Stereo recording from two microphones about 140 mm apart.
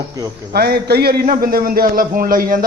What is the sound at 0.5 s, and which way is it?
A man's voice, 90° right.